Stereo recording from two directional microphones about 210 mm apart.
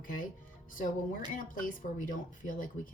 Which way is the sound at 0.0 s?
40° left (ahead or behind).